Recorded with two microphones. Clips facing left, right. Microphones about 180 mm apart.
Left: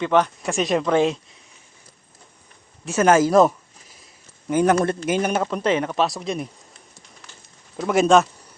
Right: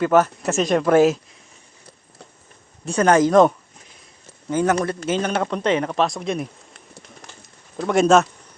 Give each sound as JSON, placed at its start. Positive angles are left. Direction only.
{"t": 0.0, "sound": "speech", "side_deg": -5}
{"t": 2.8, "sound": "speech", "side_deg": 5}
{"t": 4.7, "sound": "speech", "side_deg": 30}
{"t": 5.0, "sound": "speech", "side_deg": 10}
{"t": 7.8, "sound": "speech", "side_deg": 0}